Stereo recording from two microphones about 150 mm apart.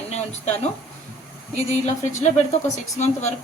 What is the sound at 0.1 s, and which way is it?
Speech, 45° left (ahead or behind).